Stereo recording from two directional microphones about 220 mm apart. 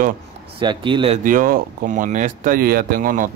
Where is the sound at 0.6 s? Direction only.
20° right (ahead or behind).